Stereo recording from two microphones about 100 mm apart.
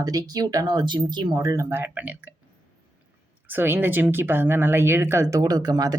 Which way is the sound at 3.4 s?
20° right (ahead or behind).